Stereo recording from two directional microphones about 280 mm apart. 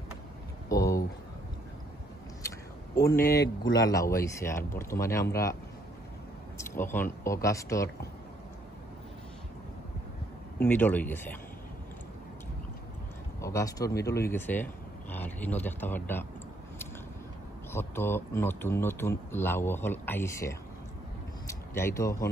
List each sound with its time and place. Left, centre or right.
0.7 s a sound: centre
3.6 s speech: centre
6.7 s speech: centre
10.6 s speech: centre
13.4 s speech: centre
17.7 s speech: centre